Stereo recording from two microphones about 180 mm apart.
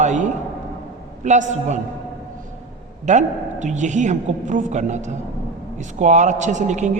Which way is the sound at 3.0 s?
40° right (ahead or behind).